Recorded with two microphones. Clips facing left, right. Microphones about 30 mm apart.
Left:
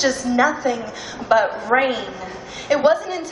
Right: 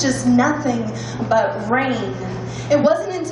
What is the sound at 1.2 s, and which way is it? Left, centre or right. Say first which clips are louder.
Speech: left 1 dB; centre.